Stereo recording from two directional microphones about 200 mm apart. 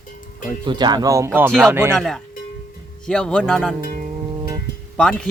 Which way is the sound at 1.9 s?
Centre (ahead or behind).